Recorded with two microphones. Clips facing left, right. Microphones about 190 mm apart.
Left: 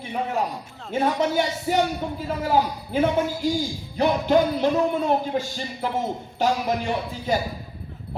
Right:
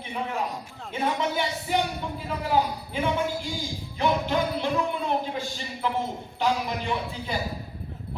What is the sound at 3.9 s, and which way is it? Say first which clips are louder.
Music: left 6 dB; 40° left (ahead or behind).